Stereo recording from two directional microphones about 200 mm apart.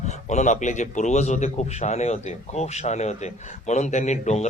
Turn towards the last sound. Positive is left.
turn(degrees=35)  # may be behind; listen again after turning